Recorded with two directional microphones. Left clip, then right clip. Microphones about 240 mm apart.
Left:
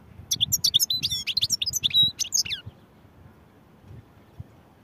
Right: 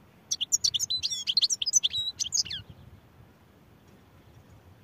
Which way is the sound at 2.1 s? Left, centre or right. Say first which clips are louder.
Left 3 dB; centre.